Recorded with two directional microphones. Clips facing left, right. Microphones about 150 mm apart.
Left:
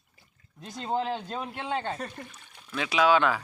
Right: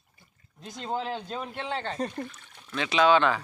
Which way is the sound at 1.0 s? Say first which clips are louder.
Left 1 dB; 5° left (ahead or behind).